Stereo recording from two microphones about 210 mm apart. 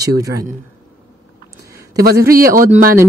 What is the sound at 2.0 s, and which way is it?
Speech, 45° right (ahead or behind).